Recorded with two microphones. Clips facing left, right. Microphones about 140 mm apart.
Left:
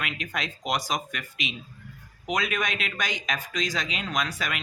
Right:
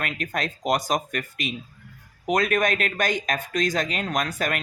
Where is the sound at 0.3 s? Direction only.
45° right (ahead or behind).